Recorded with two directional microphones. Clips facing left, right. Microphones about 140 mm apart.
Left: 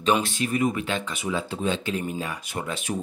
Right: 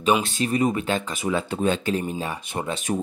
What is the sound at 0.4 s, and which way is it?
Speech, 35° right (ahead or behind).